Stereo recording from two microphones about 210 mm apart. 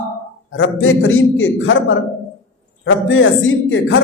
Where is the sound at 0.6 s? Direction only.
70° left (ahead or behind).